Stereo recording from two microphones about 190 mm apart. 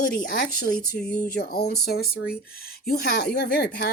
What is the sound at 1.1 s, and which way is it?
Speech, 55° left (ahead or behind).